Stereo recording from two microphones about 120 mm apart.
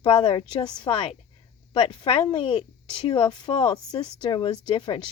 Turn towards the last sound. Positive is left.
turn(degrees=40)  # may be behind; listen again after turning